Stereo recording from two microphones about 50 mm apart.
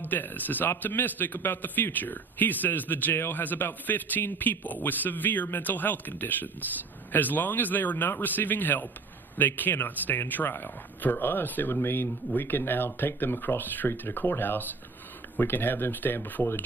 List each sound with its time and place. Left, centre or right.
0.0 s a man's voice: left